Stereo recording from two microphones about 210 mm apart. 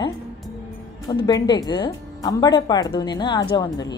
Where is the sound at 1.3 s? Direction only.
20° left (ahead or behind).